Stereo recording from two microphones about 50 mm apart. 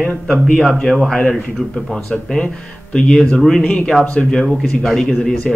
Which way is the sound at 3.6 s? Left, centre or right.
Left.